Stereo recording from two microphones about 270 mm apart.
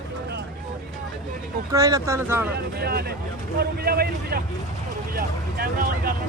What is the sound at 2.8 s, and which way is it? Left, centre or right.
Speech, right.